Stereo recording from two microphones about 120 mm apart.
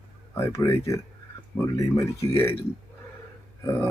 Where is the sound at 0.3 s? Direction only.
20° left (ahead or behind).